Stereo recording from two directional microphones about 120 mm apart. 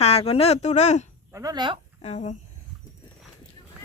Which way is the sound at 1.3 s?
30° right (ahead or behind).